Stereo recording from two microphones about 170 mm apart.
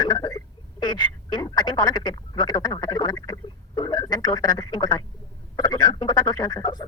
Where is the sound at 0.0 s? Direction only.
25° left (ahead or behind).